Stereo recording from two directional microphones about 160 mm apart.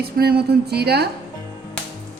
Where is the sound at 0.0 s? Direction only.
75° right (ahead or behind).